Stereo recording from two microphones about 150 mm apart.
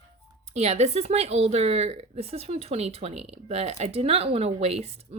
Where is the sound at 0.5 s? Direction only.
45° right (ahead or behind).